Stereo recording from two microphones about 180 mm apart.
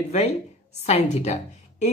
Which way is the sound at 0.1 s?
35° left (ahead or behind).